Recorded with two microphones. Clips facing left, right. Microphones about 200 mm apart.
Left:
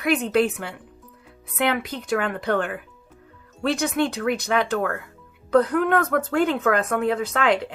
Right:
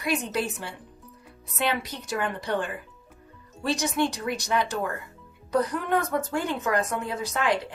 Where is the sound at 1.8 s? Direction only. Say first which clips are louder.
Left 5 dB; 60° left (ahead or behind).